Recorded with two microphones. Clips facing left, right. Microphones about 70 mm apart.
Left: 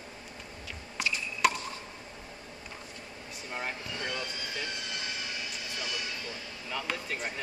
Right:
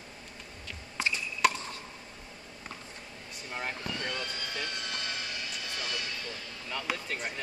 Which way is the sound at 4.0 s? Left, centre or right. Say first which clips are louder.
Even; centre.